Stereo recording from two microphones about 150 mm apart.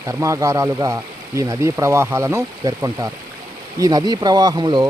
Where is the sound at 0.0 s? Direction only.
20° right (ahead or behind).